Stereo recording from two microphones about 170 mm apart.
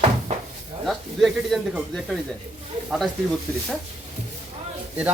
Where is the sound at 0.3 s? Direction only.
45° right (ahead or behind).